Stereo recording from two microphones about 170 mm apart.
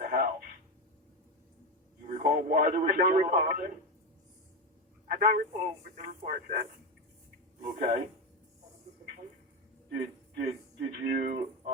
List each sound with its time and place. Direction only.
0.0 s a sound: 50° right (ahead or behind)
2.0 s a man's voice: 55° right (ahead or behind)
5.1 s a man's voice: 50° right (ahead or behind)
9.9 s a man's voice: 55° right (ahead or behind)